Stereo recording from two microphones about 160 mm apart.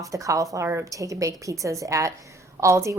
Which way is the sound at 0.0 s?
20° right (ahead or behind).